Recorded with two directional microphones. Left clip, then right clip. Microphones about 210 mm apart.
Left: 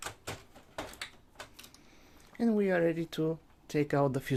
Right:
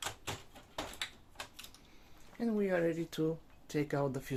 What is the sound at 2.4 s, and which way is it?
Speech, 50° left (ahead or behind).